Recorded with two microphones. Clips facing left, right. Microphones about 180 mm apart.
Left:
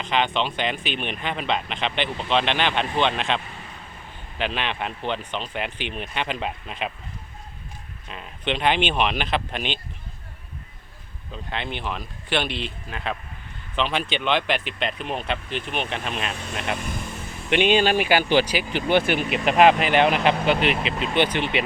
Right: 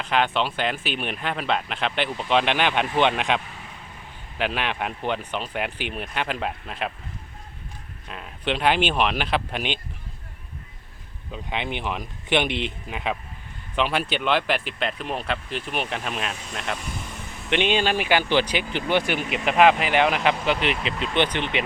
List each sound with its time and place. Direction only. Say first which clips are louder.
0.0 s speech: right 1 dB; 5° right (ahead or behind)
8.1 s speech: even; centre (ahead or behind)
11.3 s speech: right 2 dB; 15° right (ahead or behind)
17.5 s speech: left 3 dB; 10° left (ahead or behind)
18.9 s speech: left 3 dB; 15° right (ahead or behind)
19.5 s speech: left 1 dB; 20° left (ahead or behind)
19.8 s speech: left 2 dB; 15° right (ahead or behind)
20.1 s speech: left 2 dB; 25° left (ahead or behind)
21.2 s speech: left 1 dB; 10° left (ahead or behind)